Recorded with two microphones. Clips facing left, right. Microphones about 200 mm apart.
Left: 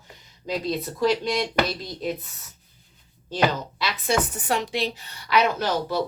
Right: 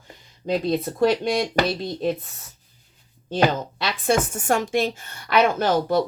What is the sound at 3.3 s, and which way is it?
Speech, 50° right (ahead or behind).